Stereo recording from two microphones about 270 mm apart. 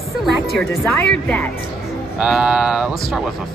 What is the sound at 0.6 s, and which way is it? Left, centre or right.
Speech, centre.